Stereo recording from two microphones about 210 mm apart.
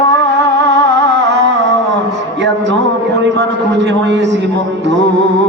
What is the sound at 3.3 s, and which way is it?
Speech, 60° right (ahead or behind).